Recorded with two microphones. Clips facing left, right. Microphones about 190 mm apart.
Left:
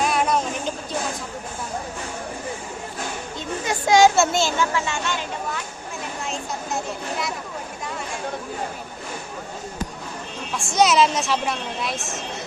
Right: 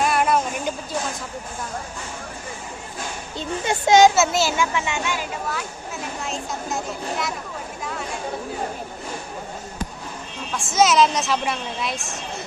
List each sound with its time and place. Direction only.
0.0 s music: centre (ahead or behind)
3.3 s speech: 25° right (ahead or behind)
4.1 s a woman's voice: 5° right (ahead or behind)
10.6 s a woman's voice: centre (ahead or behind)